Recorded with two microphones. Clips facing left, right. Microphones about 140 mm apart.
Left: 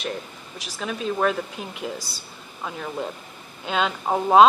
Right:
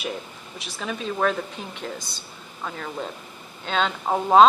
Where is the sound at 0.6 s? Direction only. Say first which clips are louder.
Left 1 dB; centre (ahead or behind).